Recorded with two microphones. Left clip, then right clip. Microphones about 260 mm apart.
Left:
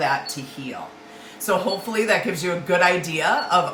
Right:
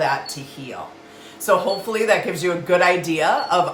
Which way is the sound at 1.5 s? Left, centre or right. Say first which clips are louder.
Right 4 dB; centre.